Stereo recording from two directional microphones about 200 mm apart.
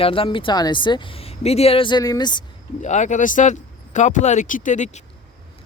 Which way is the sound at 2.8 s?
35° left (ahead or behind).